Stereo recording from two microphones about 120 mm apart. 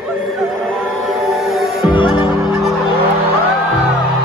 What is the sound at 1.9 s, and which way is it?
Music, 45° left (ahead or behind).